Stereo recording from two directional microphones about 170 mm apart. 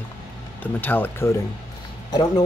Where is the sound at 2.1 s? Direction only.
25° left (ahead or behind).